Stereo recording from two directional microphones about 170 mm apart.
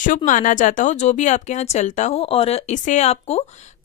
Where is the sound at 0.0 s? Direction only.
50° left (ahead or behind).